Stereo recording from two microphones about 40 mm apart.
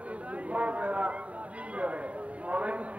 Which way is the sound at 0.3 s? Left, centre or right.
Right.